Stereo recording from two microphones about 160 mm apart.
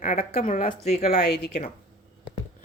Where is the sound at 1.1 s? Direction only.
90° left.